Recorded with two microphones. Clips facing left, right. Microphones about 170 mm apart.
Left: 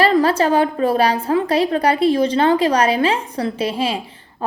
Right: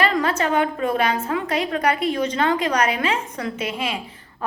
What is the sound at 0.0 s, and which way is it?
A woman's voice, 35° left (ahead or behind).